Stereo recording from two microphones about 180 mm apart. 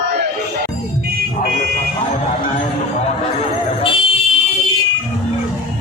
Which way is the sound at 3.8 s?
30° left (ahead or behind).